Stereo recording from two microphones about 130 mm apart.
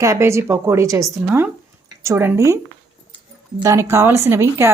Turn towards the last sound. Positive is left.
turn(degrees=-20)  # may be behind; listen again after turning